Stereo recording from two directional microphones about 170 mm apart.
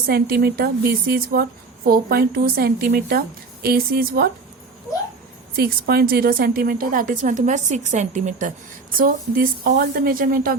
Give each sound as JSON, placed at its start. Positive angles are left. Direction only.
{"t": 0.1, "sound": "a woman's voice", "side_deg": -65}
{"t": 5.5, "sound": "a woman's voice", "side_deg": -65}
{"t": 9.0, "sound": "a woman's voice", "side_deg": -60}